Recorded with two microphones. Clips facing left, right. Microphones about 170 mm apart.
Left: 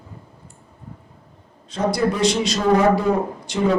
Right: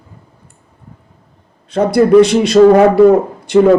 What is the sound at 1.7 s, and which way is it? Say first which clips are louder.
A man's voice: right 13 dB; 60° right (ahead or behind).